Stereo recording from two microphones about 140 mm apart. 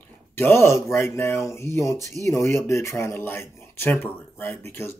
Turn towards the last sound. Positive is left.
turn(degrees=15)  # may be behind; listen again after turning